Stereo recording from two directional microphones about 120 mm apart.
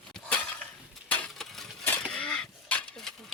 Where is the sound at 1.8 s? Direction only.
15° left (ahead or behind).